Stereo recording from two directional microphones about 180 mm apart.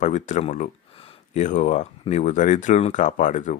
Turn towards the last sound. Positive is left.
turn(degrees=45)  # may be behind; listen again after turning